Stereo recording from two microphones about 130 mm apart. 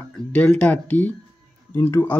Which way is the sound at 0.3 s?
10° left (ahead or behind).